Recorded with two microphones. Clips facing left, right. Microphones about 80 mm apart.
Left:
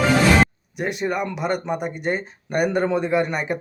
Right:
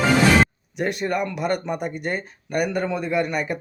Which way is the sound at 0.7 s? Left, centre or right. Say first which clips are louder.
Even; centre.